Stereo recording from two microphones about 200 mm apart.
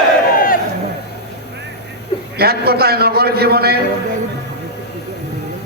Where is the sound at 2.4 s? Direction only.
50° right (ahead or behind).